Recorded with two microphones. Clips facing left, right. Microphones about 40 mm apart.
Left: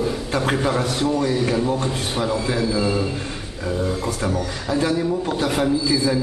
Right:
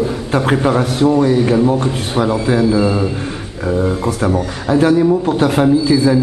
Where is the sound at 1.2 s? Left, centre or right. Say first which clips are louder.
Right 8 dB; right.